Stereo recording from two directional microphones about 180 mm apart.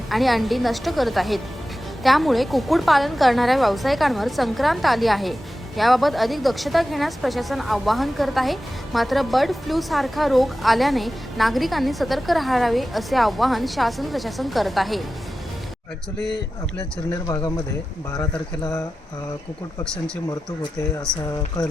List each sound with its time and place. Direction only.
0.1 s a woman's voice: centre (ahead or behind)
17.2 s speech: 20° left (ahead or behind)